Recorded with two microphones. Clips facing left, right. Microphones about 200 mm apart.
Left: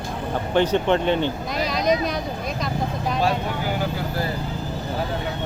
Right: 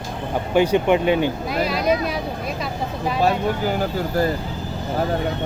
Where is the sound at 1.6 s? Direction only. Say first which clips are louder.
Even; 5° right (ahead or behind).